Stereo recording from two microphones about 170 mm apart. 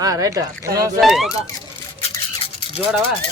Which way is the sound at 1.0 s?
Centre (ahead or behind).